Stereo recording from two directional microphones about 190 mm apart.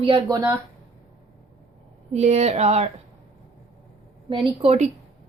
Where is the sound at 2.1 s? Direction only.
35° right (ahead or behind).